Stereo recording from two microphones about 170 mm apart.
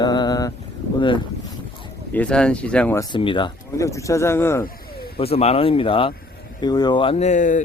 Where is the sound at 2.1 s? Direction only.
5° left (ahead or behind).